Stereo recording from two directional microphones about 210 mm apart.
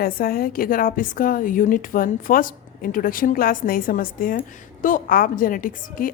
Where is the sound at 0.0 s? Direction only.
45° left (ahead or behind).